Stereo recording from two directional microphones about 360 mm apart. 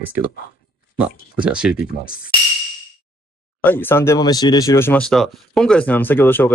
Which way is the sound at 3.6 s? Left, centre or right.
Centre.